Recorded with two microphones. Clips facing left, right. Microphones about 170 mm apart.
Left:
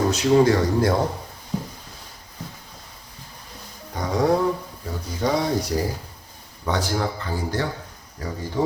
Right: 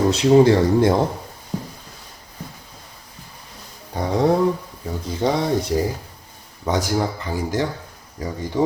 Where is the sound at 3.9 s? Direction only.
30° right (ahead or behind).